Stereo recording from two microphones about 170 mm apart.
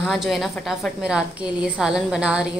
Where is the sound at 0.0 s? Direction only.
Centre (ahead or behind).